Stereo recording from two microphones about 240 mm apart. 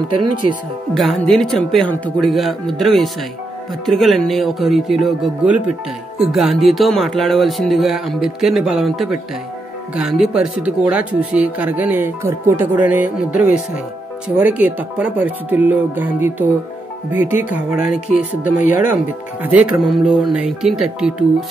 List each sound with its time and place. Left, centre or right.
0.4 s speech: right
0.9 s speech: centre
19.4 s speech: centre